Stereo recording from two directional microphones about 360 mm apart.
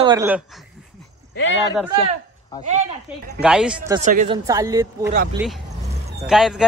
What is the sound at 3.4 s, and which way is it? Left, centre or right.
Speech, centre.